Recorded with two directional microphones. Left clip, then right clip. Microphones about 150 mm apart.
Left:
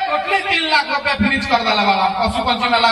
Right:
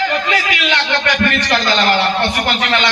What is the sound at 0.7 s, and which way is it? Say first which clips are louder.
A man's voice: right 4 dB; 10° left (ahead or behind).